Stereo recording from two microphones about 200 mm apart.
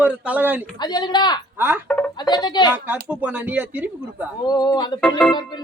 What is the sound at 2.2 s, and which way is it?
Speech, 20° left (ahead or behind).